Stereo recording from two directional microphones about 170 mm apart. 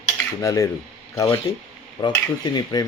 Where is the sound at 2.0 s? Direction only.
25° left (ahead or behind).